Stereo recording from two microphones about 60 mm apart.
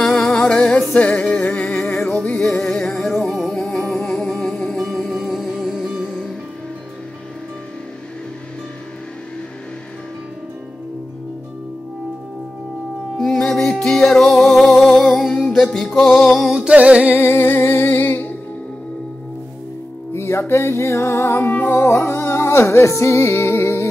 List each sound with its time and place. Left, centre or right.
0.0 s music: centre
2.5 s music: centre
13.2 s music: centre
16.6 s a sound: centre
17.1 s music: left
20.1 s music: left
21.8 s music: left